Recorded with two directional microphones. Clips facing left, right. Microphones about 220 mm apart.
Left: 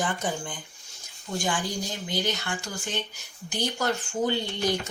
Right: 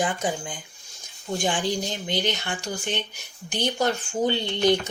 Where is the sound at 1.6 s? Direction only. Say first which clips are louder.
Right 5 dB; 75° right (ahead or behind).